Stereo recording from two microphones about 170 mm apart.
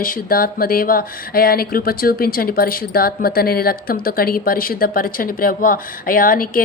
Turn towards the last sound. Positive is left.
turn(degrees=55)  # may be behind; listen again after turning